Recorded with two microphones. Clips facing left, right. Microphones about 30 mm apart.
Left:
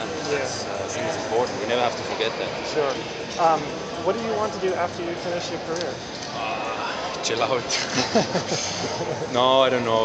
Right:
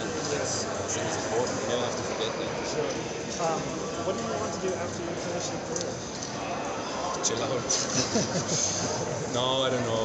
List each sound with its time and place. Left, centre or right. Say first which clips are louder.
1.3 s a sound: left 6 dB; left
3.3 s speech: left 10 dB; left
7.2 s speech: left 9 dB; left
9.3 s speech: left 9 dB; left